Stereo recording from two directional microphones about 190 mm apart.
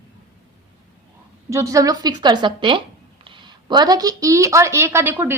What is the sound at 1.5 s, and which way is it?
A woman's voice, 15° right (ahead or behind).